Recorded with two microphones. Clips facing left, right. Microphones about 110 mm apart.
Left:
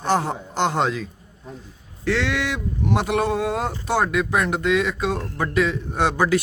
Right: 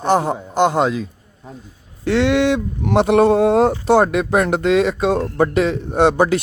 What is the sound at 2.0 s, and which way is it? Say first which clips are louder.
Speech: right 8 dB; 20° right (ahead or behind).